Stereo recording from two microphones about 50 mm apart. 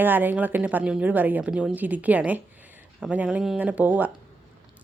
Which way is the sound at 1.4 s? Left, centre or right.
Centre.